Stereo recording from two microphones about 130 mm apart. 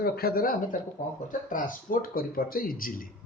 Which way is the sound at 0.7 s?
90° left.